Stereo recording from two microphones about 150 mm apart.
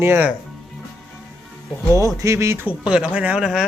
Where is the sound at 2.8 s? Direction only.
5° right (ahead or behind).